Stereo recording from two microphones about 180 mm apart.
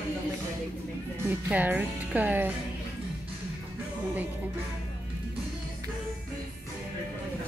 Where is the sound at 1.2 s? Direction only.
10° right (ahead or behind).